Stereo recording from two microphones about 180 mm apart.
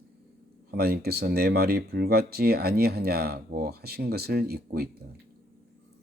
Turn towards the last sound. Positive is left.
turn(degrees=-60)  # may be behind; listen again after turning